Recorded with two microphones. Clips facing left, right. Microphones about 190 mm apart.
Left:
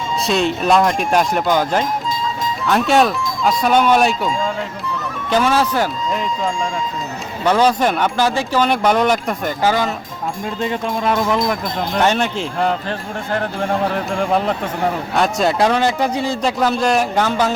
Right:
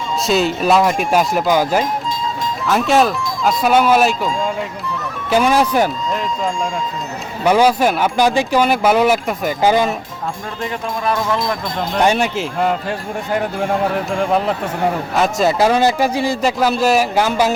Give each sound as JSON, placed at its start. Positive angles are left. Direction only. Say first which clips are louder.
{"t": 0.3, "sound": "speech", "louder": "right 1 dB", "side_deg": 0}
{"t": 5.3, "sound": "speech", "louder": "right 2 dB", "side_deg": -15}
{"t": 7.4, "sound": "speech", "louder": "right 2 dB", "side_deg": -10}
{"t": 10.6, "sound": "speech", "louder": "left 2 dB", "side_deg": 20}
{"t": 11.9, "sound": "speech", "louder": "right 2 dB", "side_deg": -10}